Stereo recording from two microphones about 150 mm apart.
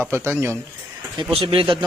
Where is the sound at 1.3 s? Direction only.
35° right (ahead or behind).